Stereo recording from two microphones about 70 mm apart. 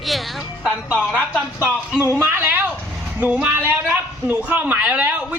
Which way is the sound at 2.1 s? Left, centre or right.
Right.